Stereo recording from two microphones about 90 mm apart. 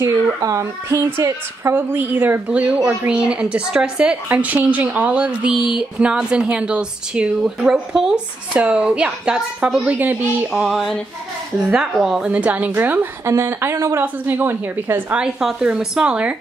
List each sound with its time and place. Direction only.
0.4 s a woman's voice: 35° right (ahead or behind); by 10.1 s 15° right (ahead or behind)
10.5 s a woman's voice: 5° right (ahead or behind); by 15.1 s 25° right (ahead or behind)
15.1 s speech: 10° right (ahead or behind)